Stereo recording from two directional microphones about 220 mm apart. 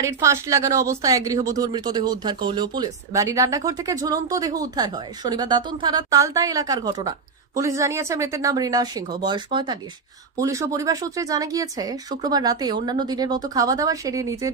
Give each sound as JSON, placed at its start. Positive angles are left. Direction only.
{"t": 0.0, "sound": "speech", "side_deg": -15}